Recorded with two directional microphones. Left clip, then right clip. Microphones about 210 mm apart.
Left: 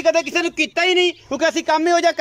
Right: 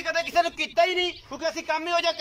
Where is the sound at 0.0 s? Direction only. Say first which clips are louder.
Left 6 dB; 45° left (ahead or behind).